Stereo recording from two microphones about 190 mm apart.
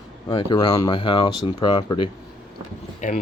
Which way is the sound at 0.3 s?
25° left (ahead or behind).